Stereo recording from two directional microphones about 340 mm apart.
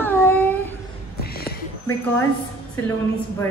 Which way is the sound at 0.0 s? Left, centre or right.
Centre.